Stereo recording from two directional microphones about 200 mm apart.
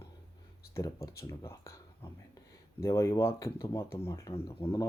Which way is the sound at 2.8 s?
15° left (ahead or behind).